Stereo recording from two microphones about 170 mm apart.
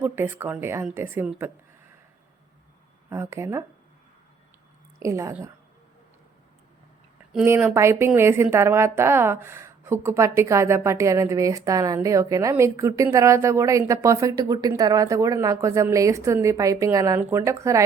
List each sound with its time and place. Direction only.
0.0 s a woman's voice: 15° right (ahead or behind)
3.1 s a woman's voice: 15° right (ahead or behind)
4.9 s a woman's voice: 15° right (ahead or behind)
7.3 s a woman's voice: 10° right (ahead or behind)